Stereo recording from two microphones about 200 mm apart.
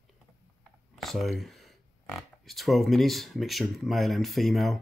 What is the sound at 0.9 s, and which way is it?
Speech, centre (ahead or behind).